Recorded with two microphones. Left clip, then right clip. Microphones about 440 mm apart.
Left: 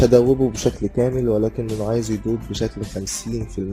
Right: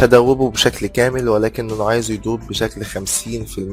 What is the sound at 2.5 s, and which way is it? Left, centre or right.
Speech, centre.